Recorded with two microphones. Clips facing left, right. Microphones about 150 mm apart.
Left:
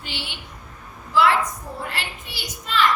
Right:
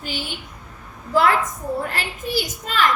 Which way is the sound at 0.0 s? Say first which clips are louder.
Right 5 dB; 45° right (ahead or behind).